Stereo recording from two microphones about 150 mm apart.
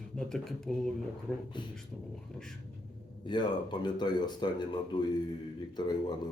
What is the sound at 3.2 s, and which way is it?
Speech, 30° left (ahead or behind).